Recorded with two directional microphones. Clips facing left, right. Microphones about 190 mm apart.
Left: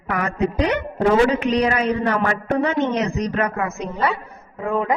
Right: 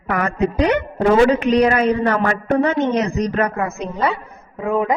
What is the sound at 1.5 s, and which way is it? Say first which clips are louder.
A woman's voice: right 4 dB; 50° right (ahead or behind).